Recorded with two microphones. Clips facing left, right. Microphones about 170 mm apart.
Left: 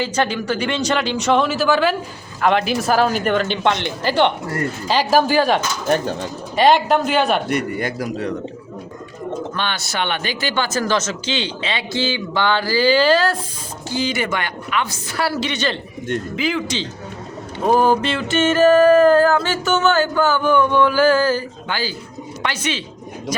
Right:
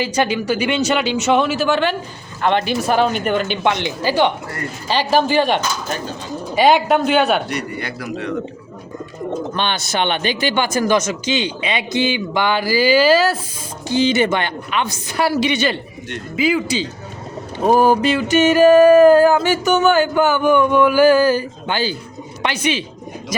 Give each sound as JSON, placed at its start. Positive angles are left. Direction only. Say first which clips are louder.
{"t": 0.0, "sound": "speech", "louder": "right 2 dB", "side_deg": -10}
{"t": 4.9, "sound": "speech", "louder": "even", "side_deg": 5}
{"t": 6.6, "sound": "speech", "louder": "right 1 dB", "side_deg": -5}
{"t": 7.5, "sound": "a man's voice", "louder": "left 4 dB", "side_deg": 45}
{"t": 9.6, "sound": "a sound", "louder": "right 5 dB", "side_deg": -20}
{"t": 13.9, "sound": "a woman's voice", "louder": "right 6 dB", "side_deg": -25}
{"t": 16.3, "sound": "a sound", "louder": "right 9 dB", "side_deg": -10}
{"t": 23.3, "sound": "speech", "louder": "right 2 dB", "side_deg": -10}